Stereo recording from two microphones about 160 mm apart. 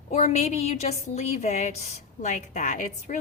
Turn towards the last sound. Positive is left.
turn(degrees=50)  # may be behind; listen again after turning